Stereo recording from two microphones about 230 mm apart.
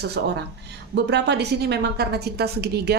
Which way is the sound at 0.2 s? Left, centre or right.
Right.